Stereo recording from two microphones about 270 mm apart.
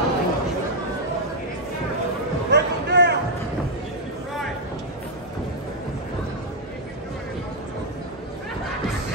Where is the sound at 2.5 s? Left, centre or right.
Right.